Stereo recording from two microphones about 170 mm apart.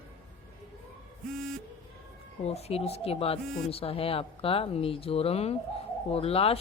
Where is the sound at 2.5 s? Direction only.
40° left (ahead or behind).